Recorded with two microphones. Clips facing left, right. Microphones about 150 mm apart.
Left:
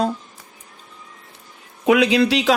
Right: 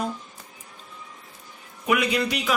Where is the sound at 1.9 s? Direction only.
90° left.